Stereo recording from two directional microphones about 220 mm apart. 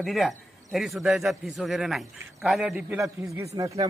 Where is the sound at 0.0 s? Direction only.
Centre (ahead or behind).